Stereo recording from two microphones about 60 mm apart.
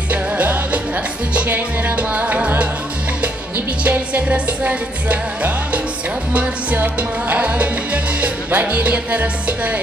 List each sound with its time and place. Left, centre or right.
0.1 s music: right
3.8 s music: right